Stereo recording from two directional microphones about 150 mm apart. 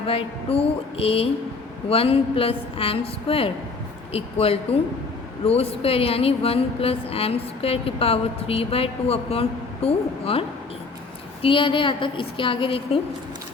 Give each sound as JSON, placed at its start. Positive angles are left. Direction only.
{"t": 0.0, "sound": "speech", "side_deg": 40}
{"t": 11.4, "sound": "speech", "side_deg": 35}